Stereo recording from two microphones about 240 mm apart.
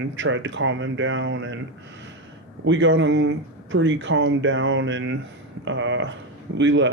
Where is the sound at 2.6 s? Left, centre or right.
Right.